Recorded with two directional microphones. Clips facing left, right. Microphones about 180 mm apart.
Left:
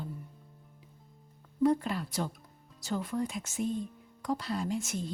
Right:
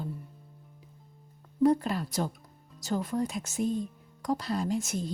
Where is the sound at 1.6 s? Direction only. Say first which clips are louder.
Right 3 dB; 40° right (ahead or behind).